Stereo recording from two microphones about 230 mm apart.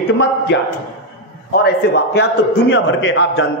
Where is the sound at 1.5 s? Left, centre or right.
Left.